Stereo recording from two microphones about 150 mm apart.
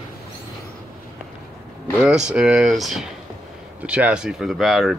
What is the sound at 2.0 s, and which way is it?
Speech, 5° right (ahead or behind).